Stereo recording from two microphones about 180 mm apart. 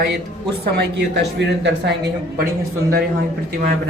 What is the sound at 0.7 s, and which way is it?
Speech, 70° right (ahead or behind).